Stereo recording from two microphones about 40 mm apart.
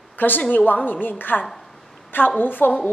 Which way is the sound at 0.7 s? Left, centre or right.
Left.